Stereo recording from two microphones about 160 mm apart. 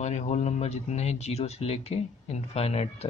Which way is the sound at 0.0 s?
45° left (ahead or behind).